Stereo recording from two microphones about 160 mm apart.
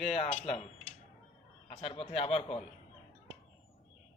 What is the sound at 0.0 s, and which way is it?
Speech, 40° left (ahead or behind).